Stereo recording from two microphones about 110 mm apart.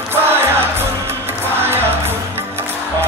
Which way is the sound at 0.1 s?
20° right (ahead or behind).